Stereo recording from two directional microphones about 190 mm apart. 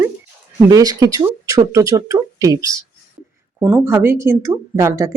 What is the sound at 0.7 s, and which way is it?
Speech, 20° right (ahead or behind).